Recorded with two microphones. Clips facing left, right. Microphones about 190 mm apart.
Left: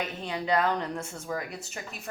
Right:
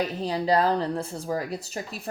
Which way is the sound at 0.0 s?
35° right (ahead or behind).